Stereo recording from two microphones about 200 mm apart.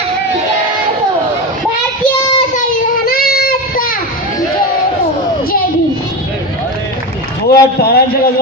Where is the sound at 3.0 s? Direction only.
50° left (ahead or behind).